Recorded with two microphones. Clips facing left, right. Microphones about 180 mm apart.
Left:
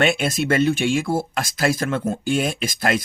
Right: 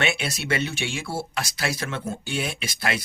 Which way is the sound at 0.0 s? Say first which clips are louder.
Left 7 dB; 50° left (ahead or behind).